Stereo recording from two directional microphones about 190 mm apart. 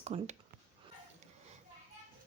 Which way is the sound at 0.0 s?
35° right (ahead or behind).